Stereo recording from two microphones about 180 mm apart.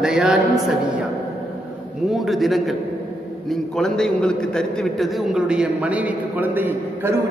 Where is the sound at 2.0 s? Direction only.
Centre (ahead or behind).